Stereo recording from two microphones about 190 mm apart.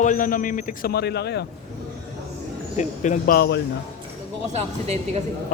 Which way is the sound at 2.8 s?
40° left (ahead or behind).